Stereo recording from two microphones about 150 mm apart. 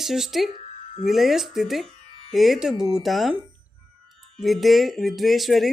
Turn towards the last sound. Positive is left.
turn(degrees=0)  # may be behind; listen again after turning